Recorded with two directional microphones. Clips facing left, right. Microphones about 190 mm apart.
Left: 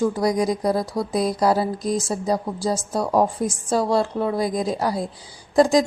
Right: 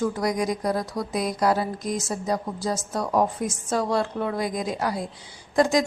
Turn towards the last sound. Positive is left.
turn(degrees=35)  # may be behind; listen again after turning